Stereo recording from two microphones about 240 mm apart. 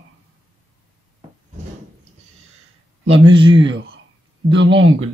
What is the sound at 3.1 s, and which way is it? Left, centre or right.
Speech, right.